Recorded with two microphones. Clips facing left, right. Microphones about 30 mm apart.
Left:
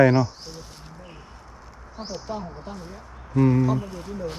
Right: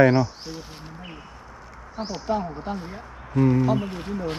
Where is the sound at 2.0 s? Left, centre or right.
Right.